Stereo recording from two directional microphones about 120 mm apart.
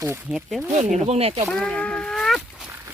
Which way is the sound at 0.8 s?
70° right (ahead or behind).